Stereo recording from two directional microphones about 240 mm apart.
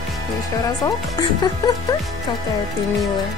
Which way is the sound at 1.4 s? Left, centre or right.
Centre.